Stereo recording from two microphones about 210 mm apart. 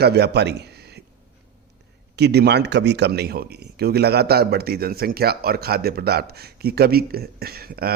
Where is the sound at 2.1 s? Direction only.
50° right (ahead or behind).